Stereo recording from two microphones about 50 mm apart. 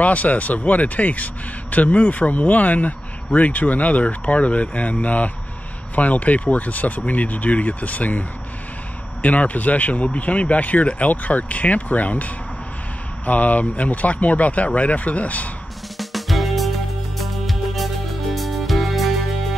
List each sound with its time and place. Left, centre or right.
0.0 s speech: left
16.0 s music: centre